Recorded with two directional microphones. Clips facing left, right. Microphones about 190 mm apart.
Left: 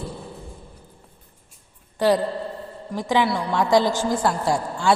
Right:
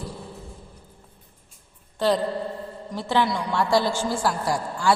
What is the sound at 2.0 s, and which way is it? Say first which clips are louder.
A woman's voice: left 2 dB; 10° left (ahead or behind).